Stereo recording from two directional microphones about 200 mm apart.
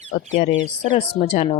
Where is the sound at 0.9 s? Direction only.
30° left (ahead or behind).